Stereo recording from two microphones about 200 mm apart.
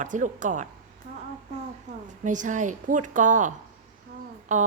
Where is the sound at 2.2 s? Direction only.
40° right (ahead or behind).